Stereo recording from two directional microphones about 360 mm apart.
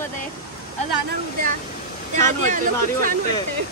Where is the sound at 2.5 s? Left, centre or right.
Right.